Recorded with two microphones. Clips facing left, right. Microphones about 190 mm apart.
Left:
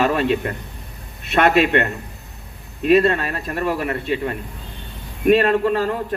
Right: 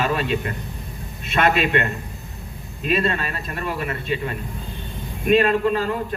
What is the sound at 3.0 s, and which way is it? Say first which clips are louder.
Speech: left 4 dB; 60° left (ahead or behind).